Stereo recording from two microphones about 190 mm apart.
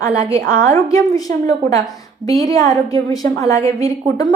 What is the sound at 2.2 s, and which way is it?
A woman's voice, 15° left (ahead or behind).